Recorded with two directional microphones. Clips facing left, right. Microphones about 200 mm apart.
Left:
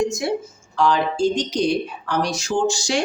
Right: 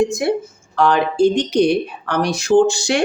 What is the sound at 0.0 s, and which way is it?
Speech, 55° right (ahead or behind).